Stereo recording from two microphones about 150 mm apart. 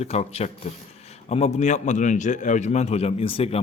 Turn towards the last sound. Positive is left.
turn(degrees=40)  # may be behind; listen again after turning